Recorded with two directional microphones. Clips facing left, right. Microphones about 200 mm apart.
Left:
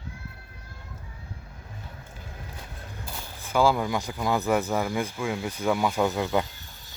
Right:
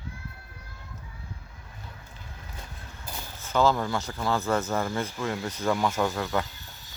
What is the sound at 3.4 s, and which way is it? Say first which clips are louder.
Speech: left 1 dB; 10° left (ahead or behind).